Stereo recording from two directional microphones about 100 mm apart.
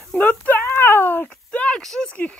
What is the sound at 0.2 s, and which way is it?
Speech, 15° left (ahead or behind).